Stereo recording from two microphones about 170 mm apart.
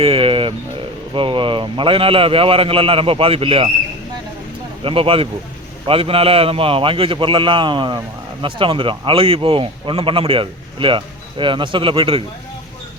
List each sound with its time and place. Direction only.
0.0 s bird: 35° right (ahead or behind)
1.1 s a man's voice: 30° right (ahead or behind)
4.8 s a man's voice: 30° right (ahead or behind)